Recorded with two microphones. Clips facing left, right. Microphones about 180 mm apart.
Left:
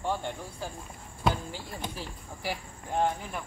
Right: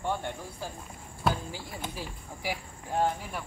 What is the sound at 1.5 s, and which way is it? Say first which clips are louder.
Speech: even; 10° right (ahead or behind).